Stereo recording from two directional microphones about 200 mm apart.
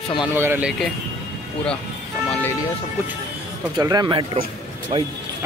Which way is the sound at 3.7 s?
20° right (ahead or behind).